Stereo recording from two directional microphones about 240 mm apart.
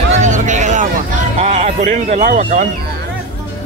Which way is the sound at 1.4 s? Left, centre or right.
Right.